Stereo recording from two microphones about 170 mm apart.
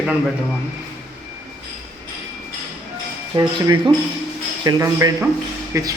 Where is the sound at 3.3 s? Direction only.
25° right (ahead or behind).